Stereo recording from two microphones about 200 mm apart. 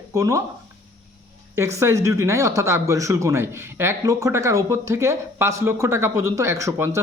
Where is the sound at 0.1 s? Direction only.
15° right (ahead or behind).